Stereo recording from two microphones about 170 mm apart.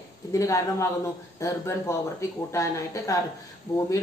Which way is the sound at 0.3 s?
20° left (ahead or behind).